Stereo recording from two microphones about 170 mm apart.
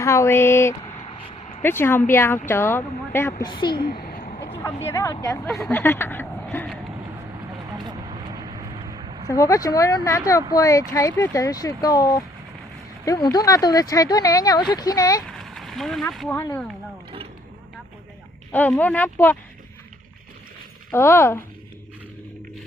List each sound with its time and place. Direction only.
0.0 s speech: 15° left (ahead or behind)
0.7 s vehicle: 35° left (ahead or behind)
1.6 s speech: 15° left (ahead or behind)
3.4 s speech: 25° left (ahead or behind)
4.9 s speech: 15° left (ahead or behind)
7.7 s a sound: 25° right (ahead or behind)
9.3 s speech: 20° left (ahead or behind)
13.3 s speech: 20° left (ahead or behind)
15.3 s a sound: centre (ahead or behind)
16.3 s speech: 15° left (ahead or behind)
18.5 s speech: 10° left (ahead or behind)
20.9 s speech: 15° left (ahead or behind)